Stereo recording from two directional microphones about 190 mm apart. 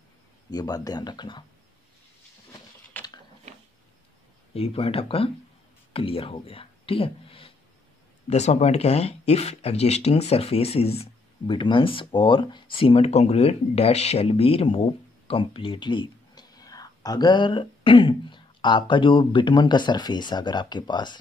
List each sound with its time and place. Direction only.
0.5 s speech: 20° left (ahead or behind)
2.9 s a sound: 10° left (ahead or behind)
4.6 s speech: 30° left (ahead or behind)